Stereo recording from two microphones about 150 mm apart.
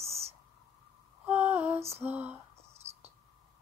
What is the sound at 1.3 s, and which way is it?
Lullaby, 10° right (ahead or behind).